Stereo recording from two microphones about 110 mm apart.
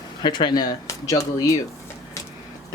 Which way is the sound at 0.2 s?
45° left (ahead or behind).